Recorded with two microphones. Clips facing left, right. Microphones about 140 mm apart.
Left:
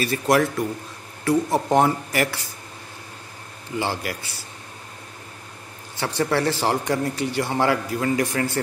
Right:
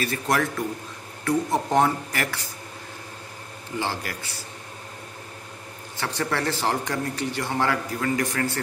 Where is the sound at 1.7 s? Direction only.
15° left (ahead or behind).